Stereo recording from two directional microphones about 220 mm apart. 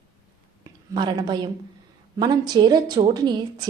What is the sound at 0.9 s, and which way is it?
A woman's voice, 20° right (ahead or behind).